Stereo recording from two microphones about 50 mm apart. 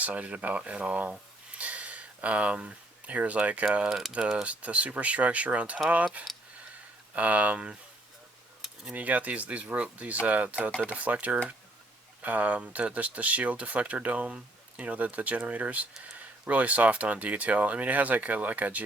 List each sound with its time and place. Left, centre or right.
0.0 s speech: right
3.8 s speech: centre
4.1 s speech: centre
9.0 s speech: right